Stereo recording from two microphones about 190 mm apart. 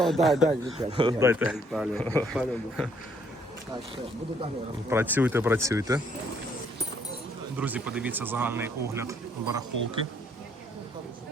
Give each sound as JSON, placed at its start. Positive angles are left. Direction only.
{"t": 0.0, "sound": "a man's voice", "side_deg": 0}
{"t": 0.4, "sound": "speech", "side_deg": -30}
{"t": 1.2, "sound": "speech", "side_deg": -15}
{"t": 1.5, "sound": "a man's voice", "side_deg": 0}
{"t": 4.9, "sound": "speech", "side_deg": -10}
{"t": 7.5, "sound": "speech", "side_deg": -10}